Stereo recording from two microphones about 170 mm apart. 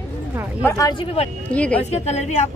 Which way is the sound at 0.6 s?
20° left (ahead or behind).